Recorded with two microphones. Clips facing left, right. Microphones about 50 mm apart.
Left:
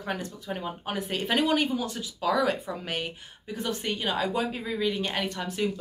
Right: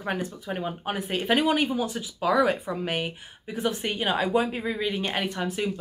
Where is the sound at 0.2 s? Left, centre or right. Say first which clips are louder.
Right 3 dB; centre.